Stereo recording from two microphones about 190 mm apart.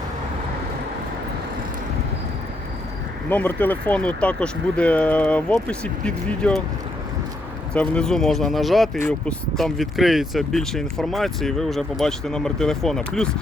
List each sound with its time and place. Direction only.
3.2 s speech: 10° left (ahead or behind)
7.7 s speech: 5° left (ahead or behind)